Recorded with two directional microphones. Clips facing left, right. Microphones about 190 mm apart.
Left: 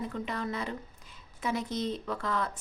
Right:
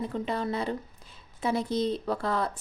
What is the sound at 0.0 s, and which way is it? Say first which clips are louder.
A woman's voice: right 4 dB; 30° right (ahead or behind).